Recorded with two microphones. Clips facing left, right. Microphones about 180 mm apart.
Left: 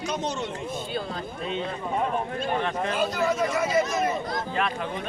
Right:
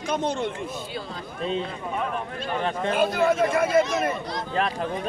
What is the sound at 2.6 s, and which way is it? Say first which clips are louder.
Speech: right 1 dB; 30° right (ahead or behind).